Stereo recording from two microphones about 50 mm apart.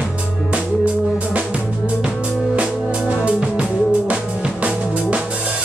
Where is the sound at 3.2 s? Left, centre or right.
Right.